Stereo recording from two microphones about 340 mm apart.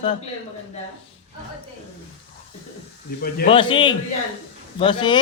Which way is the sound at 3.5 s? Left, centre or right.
Centre.